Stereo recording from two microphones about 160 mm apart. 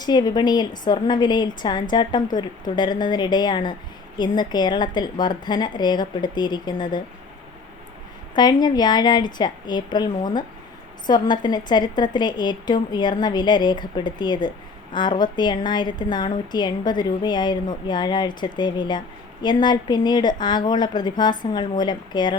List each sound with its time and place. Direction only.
0.0 s a woman's voice: 25° left (ahead or behind)
8.4 s a woman's voice: 25° left (ahead or behind)